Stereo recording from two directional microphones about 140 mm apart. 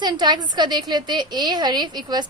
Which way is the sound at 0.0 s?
30° right (ahead or behind).